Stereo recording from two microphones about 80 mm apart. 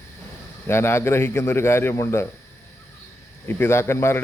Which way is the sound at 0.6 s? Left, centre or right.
Left.